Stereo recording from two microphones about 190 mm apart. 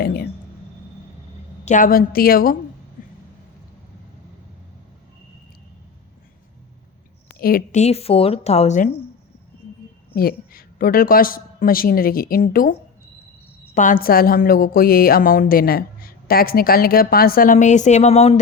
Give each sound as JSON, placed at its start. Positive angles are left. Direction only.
{"t": 0.0, "sound": "speech", "side_deg": 55}
{"t": 1.6, "sound": "speech", "side_deg": 40}
{"t": 7.3, "sound": "a woman's voice", "side_deg": 50}
{"t": 7.8, "sound": "speech", "side_deg": 35}
{"t": 10.2, "sound": "speech", "side_deg": 50}
{"t": 13.7, "sound": "speech", "side_deg": 45}